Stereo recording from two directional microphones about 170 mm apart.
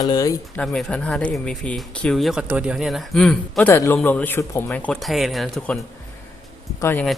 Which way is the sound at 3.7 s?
15° left (ahead or behind).